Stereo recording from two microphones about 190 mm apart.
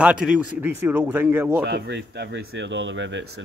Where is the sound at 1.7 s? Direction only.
65° right (ahead or behind).